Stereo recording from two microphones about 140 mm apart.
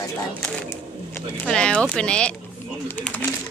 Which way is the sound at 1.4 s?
5° left (ahead or behind).